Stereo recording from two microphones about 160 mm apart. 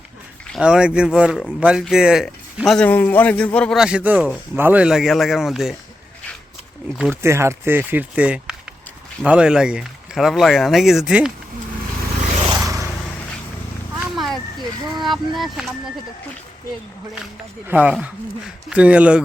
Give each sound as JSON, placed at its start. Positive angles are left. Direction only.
{"t": 0.5, "sound": "speech", "side_deg": -5}
{"t": 3.8, "sound": "speech", "side_deg": -5}
{"t": 6.9, "sound": "speech", "side_deg": -10}
{"t": 12.6, "sound": "vehicle", "side_deg": -20}
{"t": 14.0, "sound": "a sound", "side_deg": 0}
{"t": 14.9, "sound": "speech", "side_deg": 0}
{"t": 17.7, "sound": "speech", "side_deg": -10}